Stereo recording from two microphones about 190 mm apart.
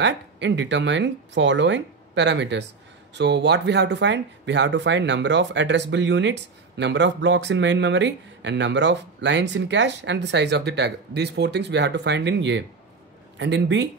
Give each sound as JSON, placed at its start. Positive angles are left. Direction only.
{"t": 0.0, "sound": "speech", "side_deg": -70}